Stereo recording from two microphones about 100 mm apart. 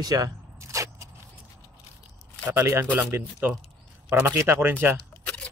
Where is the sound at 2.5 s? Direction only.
25° right (ahead or behind).